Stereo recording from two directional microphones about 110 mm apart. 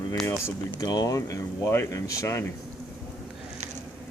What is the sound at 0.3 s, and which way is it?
Speech, 25° left (ahead or behind).